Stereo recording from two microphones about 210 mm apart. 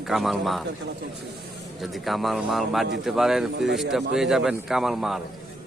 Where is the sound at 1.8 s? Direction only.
Centre (ahead or behind).